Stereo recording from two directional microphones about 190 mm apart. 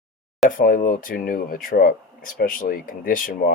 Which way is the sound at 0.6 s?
45° left (ahead or behind).